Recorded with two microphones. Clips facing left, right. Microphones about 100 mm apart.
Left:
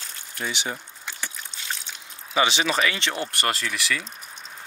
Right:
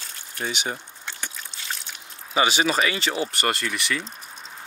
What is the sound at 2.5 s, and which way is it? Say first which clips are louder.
Speech: right 2 dB; 40° right (ahead or behind).